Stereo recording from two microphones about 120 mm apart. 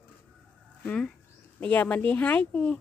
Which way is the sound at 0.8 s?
5° left (ahead or behind).